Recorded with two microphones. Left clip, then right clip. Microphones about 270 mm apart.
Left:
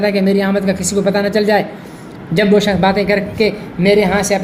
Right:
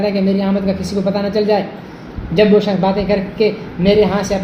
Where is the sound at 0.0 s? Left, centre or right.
Left.